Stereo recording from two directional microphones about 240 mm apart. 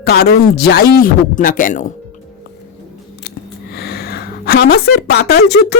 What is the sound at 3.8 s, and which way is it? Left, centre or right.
A woman's voice, left.